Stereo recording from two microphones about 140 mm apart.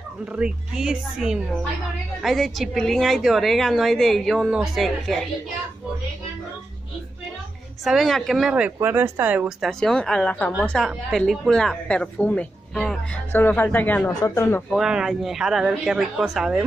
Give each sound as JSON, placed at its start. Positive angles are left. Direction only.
{"t": 0.3, "sound": "a woman's voice", "side_deg": -5}
{"t": 7.8, "sound": "a woman's voice", "side_deg": 0}
{"t": 9.6, "sound": "a woman's voice", "side_deg": 5}
{"t": 13.3, "sound": "speech", "side_deg": 15}
{"t": 14.7, "sound": "a woman's voice", "side_deg": -5}